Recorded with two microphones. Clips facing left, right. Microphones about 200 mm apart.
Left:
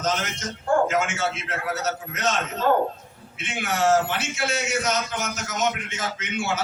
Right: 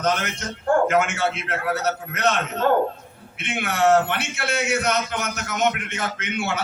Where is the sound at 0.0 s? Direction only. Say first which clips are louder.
Right 3 dB; 60° right (ahead or behind).